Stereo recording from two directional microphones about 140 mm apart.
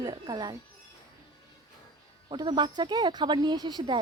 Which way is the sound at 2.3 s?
30° right (ahead or behind).